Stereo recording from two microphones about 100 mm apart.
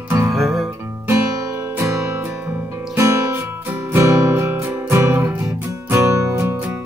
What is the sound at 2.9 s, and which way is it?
Music, 30° right (ahead or behind).